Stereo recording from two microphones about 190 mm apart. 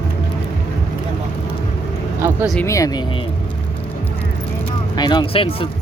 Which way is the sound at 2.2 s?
15° right (ahead or behind).